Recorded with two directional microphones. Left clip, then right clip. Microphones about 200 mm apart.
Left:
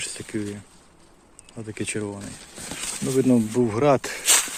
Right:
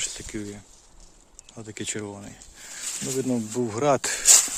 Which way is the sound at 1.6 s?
Centre (ahead or behind).